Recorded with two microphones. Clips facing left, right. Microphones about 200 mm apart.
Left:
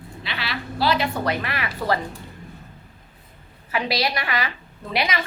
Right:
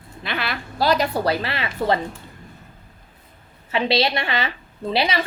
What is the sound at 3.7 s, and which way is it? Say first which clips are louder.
A woman's voice: right 4 dB; 25° right (ahead or behind).